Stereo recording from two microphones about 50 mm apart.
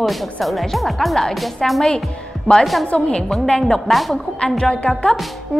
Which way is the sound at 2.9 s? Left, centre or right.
Centre.